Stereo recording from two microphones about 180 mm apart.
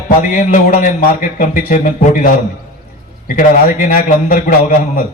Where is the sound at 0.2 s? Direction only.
45° left (ahead or behind).